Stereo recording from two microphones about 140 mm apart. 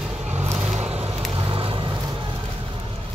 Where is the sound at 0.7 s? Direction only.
45° right (ahead or behind).